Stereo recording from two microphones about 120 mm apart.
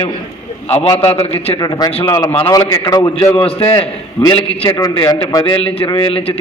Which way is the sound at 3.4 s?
55° left (ahead or behind).